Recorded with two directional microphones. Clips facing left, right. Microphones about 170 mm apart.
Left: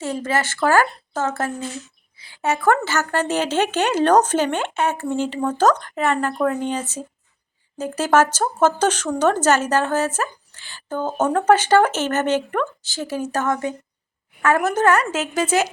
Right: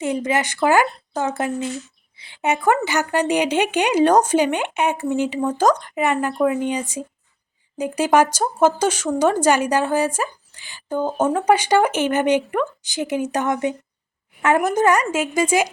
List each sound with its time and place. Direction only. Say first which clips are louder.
0.0 s a woman's voice: right 2 dB; 15° right (ahead or behind)